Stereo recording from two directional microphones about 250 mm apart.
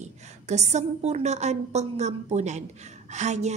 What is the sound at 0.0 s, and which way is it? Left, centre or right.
A woman's voice, right.